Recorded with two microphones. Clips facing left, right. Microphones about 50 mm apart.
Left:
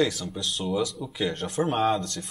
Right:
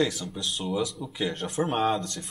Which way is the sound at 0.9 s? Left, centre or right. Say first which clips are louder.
Left 2 dB; centre.